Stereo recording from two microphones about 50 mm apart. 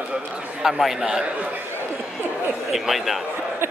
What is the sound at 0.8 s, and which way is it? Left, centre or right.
Speech, centre.